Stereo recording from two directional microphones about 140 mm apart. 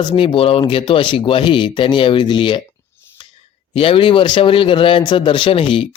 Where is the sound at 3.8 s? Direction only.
40° left (ahead or behind).